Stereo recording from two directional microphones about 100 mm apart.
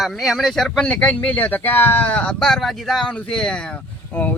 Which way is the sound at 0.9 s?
15° left (ahead or behind).